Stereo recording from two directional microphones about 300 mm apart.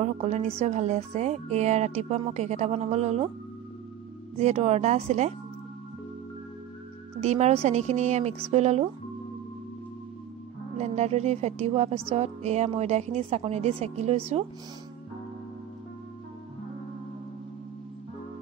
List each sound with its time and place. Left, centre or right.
0.0 s a woman's voice: right
4.4 s a woman's voice: right
7.2 s a woman's voice: right
10.8 s a woman's voice: right